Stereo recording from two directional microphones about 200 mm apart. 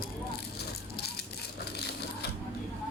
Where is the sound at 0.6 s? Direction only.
55° left (ahead or behind).